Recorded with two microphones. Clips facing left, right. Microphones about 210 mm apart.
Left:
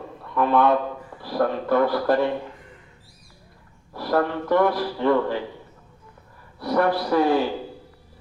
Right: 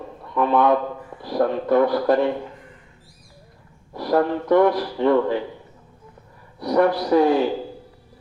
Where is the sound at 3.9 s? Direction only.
20° right (ahead or behind).